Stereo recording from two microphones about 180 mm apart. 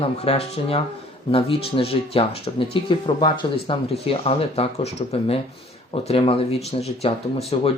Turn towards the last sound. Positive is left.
turn(degrees=35)  # may be behind; listen again after turning